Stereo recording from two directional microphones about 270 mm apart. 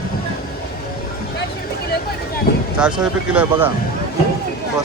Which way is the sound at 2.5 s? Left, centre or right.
Left.